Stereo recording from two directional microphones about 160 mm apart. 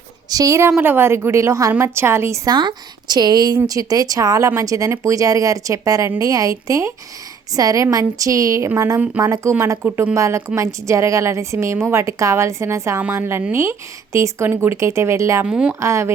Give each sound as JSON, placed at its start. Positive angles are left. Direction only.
{"t": 0.3, "sound": "speech", "side_deg": -20}
{"t": 15.4, "sound": "speech", "side_deg": -5}
{"t": 15.8, "sound": "speech", "side_deg": -20}